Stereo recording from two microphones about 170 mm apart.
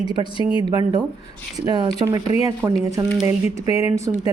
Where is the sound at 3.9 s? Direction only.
20° right (ahead or behind).